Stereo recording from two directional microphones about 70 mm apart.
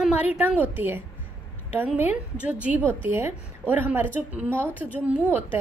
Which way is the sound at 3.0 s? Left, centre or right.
Right.